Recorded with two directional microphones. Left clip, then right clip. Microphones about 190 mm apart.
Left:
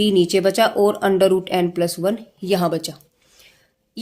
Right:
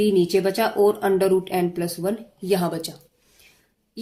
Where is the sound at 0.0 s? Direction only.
50° left (ahead or behind).